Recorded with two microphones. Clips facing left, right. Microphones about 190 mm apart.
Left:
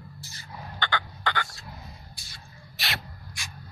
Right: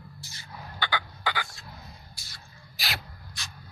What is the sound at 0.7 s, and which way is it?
Crow, 10° right (ahead or behind).